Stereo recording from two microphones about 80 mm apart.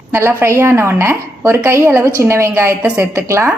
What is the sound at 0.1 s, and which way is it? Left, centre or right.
A woman's voice, right.